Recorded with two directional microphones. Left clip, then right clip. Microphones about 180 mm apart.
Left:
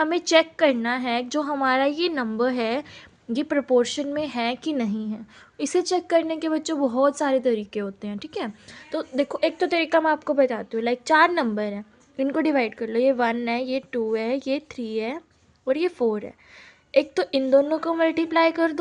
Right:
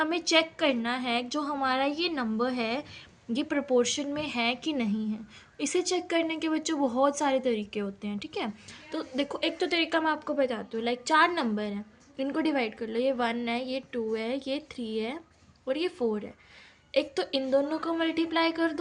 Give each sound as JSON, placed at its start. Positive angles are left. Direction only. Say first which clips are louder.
{"t": 0.0, "sound": "a woman's voice", "louder": "left 6 dB", "side_deg": 50}